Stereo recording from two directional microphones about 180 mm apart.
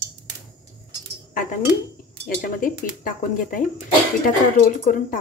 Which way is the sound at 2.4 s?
50° left (ahead or behind).